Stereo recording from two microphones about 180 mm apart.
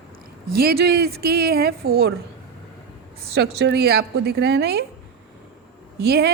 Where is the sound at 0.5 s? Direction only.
60° right (ahead or behind).